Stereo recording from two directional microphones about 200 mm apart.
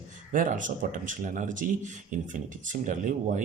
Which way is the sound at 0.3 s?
40° right (ahead or behind).